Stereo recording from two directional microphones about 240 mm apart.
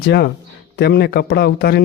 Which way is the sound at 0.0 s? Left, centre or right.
Left.